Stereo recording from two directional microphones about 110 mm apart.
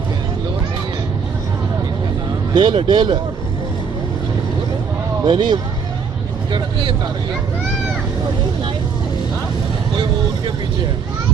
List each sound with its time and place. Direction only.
2.6 s speech: 45° right (ahead or behind)
5.2 s speech: 45° right (ahead or behind)